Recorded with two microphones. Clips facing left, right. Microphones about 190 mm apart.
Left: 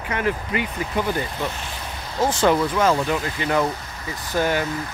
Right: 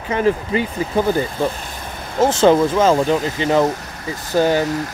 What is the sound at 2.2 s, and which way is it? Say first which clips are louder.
Speech: right 6 dB; 25° right (ahead or behind).